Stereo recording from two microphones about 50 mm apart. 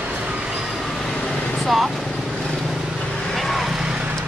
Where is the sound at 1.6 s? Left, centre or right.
Centre.